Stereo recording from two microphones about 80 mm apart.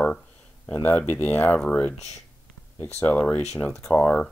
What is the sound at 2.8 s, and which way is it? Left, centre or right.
Speech, left.